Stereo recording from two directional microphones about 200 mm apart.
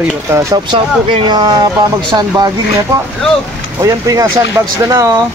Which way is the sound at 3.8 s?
15° right (ahead or behind).